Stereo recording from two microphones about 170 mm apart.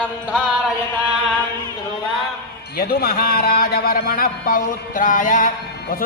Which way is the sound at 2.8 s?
65° left (ahead or behind).